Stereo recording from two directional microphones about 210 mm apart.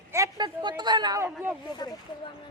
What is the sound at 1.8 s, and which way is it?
Speech, 20° left (ahead or behind).